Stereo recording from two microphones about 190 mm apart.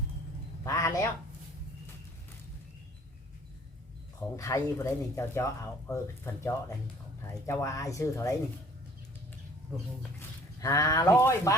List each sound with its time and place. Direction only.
0.6 s a sound: 15° left (ahead or behind)
4.2 s speech: 15° left (ahead or behind)
10.2 s speech: 15° left (ahead or behind)